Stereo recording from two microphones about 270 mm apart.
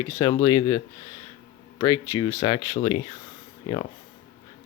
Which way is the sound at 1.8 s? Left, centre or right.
Centre.